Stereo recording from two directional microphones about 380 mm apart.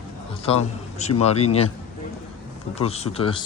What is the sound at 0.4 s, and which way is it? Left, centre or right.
A man's voice, centre.